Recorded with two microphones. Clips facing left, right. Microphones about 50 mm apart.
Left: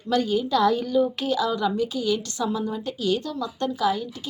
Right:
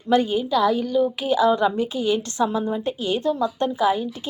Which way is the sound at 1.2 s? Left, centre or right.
Right.